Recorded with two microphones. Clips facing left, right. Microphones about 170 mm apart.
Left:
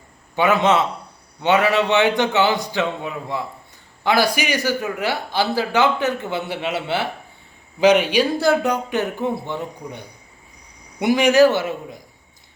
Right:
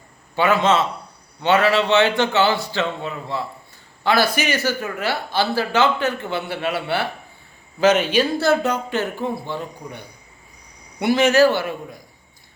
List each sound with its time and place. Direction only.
0.3 s a man's voice: 20° left (ahead or behind)
11.0 s a man's voice: 15° left (ahead or behind)